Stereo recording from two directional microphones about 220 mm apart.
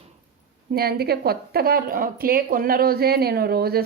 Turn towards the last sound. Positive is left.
turn(degrees=-45)  # may be behind; listen again after turning